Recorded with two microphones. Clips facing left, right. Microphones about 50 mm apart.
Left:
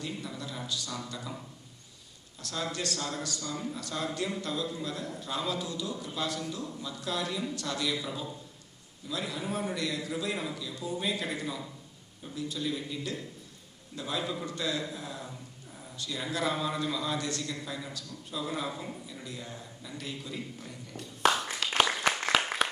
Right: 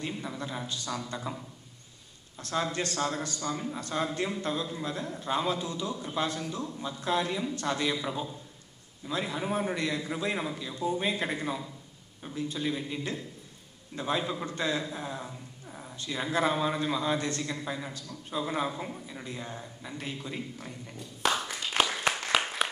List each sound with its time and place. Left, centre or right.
0.0 s a man's voice: right
2.4 s a man's voice: right
21.6 s a sound: left
22.6 s applause: centre